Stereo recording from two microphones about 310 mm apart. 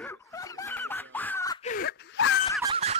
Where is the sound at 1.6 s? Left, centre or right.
Left.